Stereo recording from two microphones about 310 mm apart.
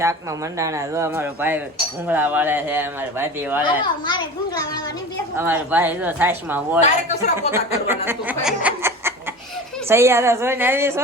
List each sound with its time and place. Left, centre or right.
0.0 s speech: centre
3.6 s a child's voice: centre
5.4 s speech: centre
6.8 s a man's voice: left
7.5 s speech: centre
8.4 s snicker: centre
9.9 s speech: centre